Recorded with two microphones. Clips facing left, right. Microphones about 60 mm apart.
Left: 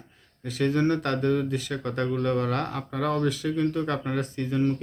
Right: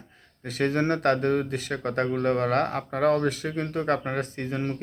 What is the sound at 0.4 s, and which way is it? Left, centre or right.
Speech, right.